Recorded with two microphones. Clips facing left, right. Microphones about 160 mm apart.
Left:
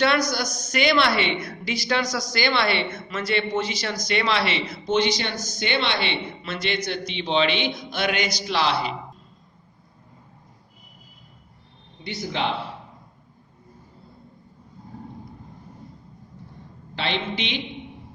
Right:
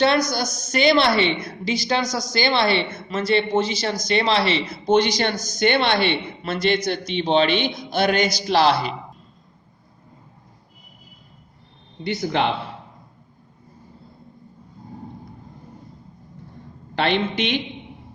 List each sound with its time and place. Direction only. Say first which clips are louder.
0.3 s a woman's voice: right 2 dB; 25° right (ahead or behind)
4.9 s a man's voice: right 5 dB; 45° right (ahead or behind)
12.0 s a man's voice: right 6 dB; 55° right (ahead or behind)
16.9 s a man's voice: right 6 dB; 55° right (ahead or behind)